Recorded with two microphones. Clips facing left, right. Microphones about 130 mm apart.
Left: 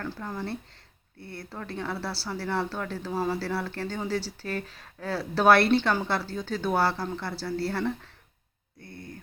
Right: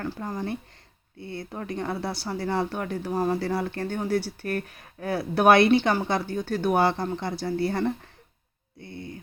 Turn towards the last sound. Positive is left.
turn(degrees=-15)  # may be behind; listen again after turning